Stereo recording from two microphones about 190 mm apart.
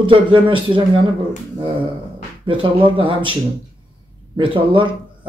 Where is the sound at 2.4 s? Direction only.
25° right (ahead or behind).